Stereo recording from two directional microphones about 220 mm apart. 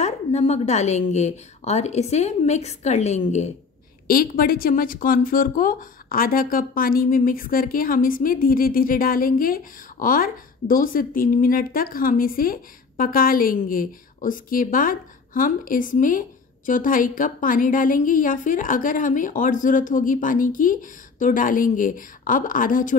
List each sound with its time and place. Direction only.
0.0 s a woman's voice: 30° left (ahead or behind)
4.1 s a woman's voice: 40° left (ahead or behind)